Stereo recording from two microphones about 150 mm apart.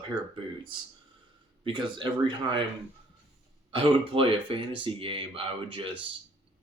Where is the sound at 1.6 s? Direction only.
30° right (ahead or behind).